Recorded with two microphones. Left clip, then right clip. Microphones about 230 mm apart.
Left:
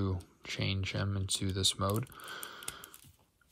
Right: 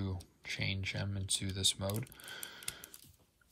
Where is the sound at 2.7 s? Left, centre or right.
Centre.